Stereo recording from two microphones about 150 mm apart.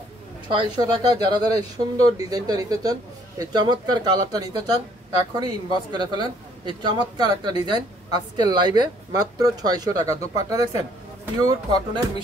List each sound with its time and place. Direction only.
0.5 s speech: 30° right (ahead or behind)